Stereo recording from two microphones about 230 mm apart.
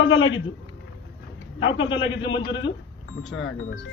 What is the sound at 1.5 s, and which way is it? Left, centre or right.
A man's voice, left.